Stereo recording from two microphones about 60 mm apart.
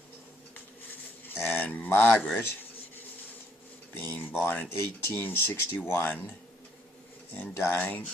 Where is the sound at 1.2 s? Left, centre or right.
Left.